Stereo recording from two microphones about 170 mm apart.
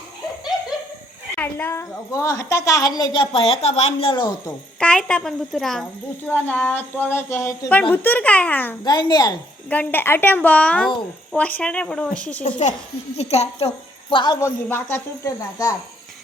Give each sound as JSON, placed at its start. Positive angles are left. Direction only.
{"t": 1.4, "sound": "a woman's voice", "side_deg": 10}
{"t": 4.8, "sound": "a woman's voice", "side_deg": 5}
{"t": 8.8, "sound": "a woman's voice", "side_deg": 25}
{"t": 9.6, "sound": "a woman's voice", "side_deg": 10}
{"t": 12.4, "sound": "a woman's voice", "side_deg": 45}
{"t": 14.1, "sound": "a woman's voice", "side_deg": 25}